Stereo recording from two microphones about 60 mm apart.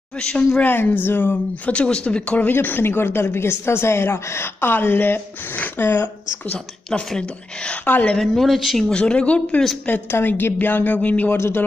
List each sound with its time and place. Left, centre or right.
0.2 s speech: centre
0.6 s speech: left
1.7 s speech: centre
2.4 s speech: left
7.1 s speech: centre
8.4 s speech: centre
8.9 s speech: centre
10.1 s speech: left
11.3 s speech: left